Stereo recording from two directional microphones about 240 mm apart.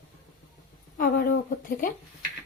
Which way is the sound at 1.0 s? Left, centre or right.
Left.